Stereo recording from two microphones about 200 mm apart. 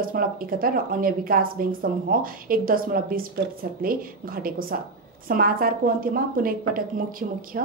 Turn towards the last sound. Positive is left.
turn(degrees=-45)  # may be behind; listen again after turning